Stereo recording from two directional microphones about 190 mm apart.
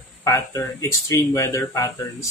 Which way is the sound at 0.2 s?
15° left (ahead or behind).